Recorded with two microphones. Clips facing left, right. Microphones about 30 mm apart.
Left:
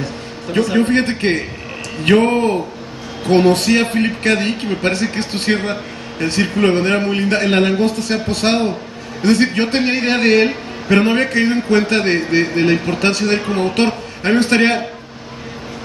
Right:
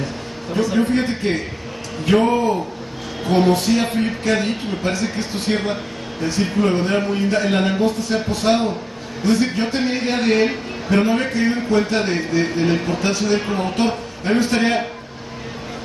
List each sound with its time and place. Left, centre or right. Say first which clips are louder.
0.0 s a man's voice: left 2 dB; left